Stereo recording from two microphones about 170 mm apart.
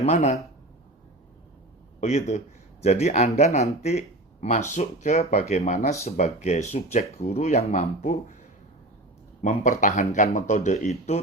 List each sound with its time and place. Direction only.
0.0 s speech: 40° left (ahead or behind)
2.0 s speech: 40° left (ahead or behind)
9.4 s speech: 45° left (ahead or behind)